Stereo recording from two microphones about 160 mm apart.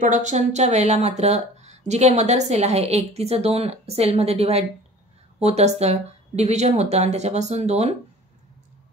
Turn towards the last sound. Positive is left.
turn(degrees=-45)  # may be behind; listen again after turning